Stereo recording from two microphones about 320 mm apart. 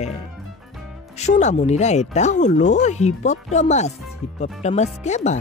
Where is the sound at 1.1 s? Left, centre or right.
Left.